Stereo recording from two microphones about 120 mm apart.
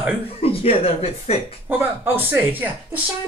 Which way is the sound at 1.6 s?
15° right (ahead or behind).